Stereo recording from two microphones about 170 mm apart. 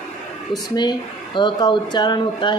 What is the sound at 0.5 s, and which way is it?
Speech, 25° left (ahead or behind).